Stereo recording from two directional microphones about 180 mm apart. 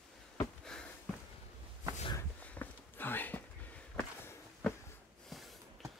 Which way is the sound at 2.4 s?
10° left (ahead or behind).